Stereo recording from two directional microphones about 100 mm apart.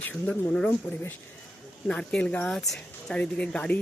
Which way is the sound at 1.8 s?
10° left (ahead or behind).